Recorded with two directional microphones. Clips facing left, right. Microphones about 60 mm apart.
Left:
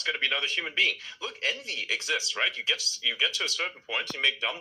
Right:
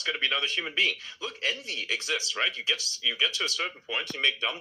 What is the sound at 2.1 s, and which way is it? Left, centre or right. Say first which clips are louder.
Speech: left 1 dB; centre.